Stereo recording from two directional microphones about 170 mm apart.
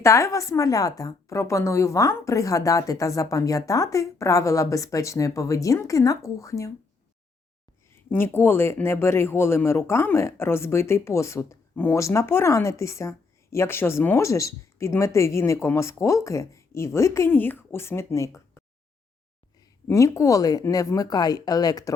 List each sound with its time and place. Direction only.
0.0 s a woman's voice: 15° left (ahead or behind)
7.9 s speech: 15° left (ahead or behind)
19.9 s a woman's voice: 15° left (ahead or behind)